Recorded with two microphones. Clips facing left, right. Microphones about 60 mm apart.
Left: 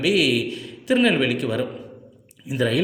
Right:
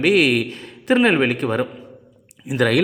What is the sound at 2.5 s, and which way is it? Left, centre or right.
Speech, right.